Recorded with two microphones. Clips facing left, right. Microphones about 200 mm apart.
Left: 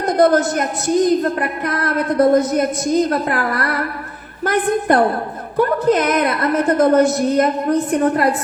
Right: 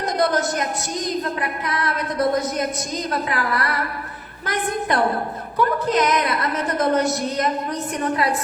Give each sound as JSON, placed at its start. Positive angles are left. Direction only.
{"t": 0.2, "sound": "a woman's voice", "side_deg": 55}